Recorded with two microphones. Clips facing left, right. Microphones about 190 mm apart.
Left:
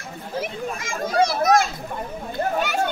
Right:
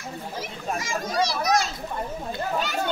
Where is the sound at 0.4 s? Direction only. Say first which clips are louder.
Left 4 dB; 55° left (ahead or behind).